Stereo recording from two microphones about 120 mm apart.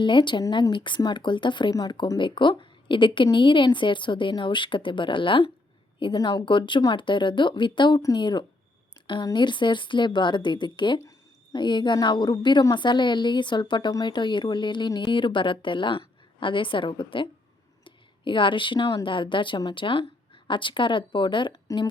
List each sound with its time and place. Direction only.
0.0 s a woman's voice: 40° left (ahead or behind)